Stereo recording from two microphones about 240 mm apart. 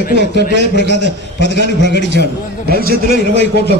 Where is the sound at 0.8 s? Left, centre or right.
Left.